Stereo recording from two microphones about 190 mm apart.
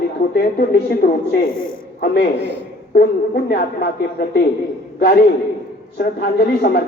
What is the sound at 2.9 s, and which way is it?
Speech, 55° left (ahead or behind).